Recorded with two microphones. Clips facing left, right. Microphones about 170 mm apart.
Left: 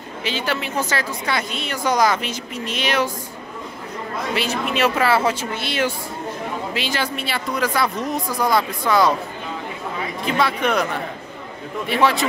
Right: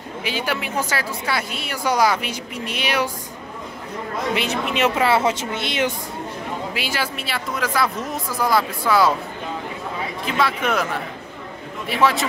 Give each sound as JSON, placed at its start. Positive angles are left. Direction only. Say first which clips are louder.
{"t": 0.2, "sound": "speech", "louder": "left 1 dB", "side_deg": -10}
{"t": 4.6, "sound": "speech", "louder": "even", "side_deg": -20}
{"t": 6.7, "sound": "speech", "louder": "left 3 dB", "side_deg": -10}
{"t": 10.2, "sound": "speech", "louder": "left 2 dB", "side_deg": 0}